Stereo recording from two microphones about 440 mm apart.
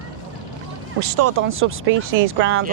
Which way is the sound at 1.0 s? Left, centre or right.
Right.